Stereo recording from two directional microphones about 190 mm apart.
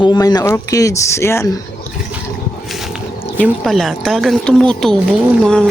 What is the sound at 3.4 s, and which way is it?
Speech, centre (ahead or behind).